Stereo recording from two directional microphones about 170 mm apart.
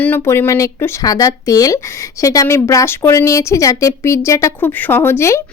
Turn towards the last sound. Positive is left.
turn(degrees=15)  # may be behind; listen again after turning